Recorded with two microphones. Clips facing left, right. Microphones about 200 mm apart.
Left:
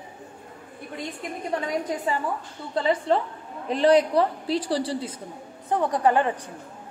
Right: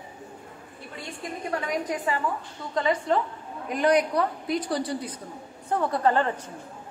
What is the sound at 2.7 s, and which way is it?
A woman's voice, 30° left (ahead or behind).